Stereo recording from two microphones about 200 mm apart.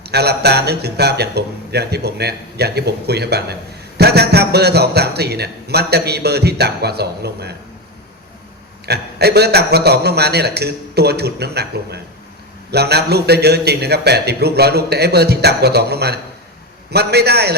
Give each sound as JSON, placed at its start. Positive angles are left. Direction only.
{"t": 0.0, "sound": "speech", "side_deg": -55}
{"t": 8.9, "sound": "speech", "side_deg": -55}